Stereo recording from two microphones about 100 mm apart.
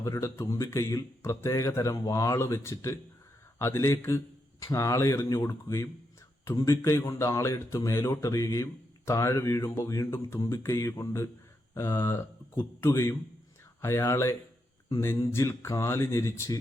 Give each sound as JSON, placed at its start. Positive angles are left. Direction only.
{"t": 0.0, "sound": "speech", "side_deg": 30}